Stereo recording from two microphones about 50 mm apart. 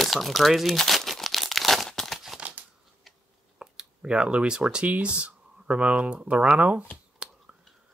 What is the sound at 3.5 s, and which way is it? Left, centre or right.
Speech, centre.